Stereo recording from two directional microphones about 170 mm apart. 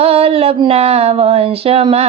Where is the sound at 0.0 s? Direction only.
35° right (ahead or behind).